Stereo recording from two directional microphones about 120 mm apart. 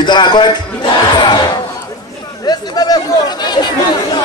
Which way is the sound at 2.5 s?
35° left (ahead or behind).